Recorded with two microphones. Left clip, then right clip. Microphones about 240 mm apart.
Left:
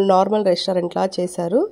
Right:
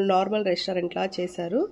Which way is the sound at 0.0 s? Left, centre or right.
Left.